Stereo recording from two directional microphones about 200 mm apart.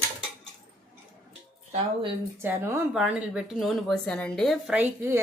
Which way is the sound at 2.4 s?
10° right (ahead or behind).